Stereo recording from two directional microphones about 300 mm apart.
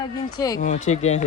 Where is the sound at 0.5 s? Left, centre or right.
Left.